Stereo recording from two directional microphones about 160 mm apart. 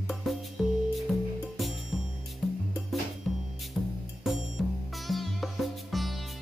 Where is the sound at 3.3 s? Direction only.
Centre (ahead or behind).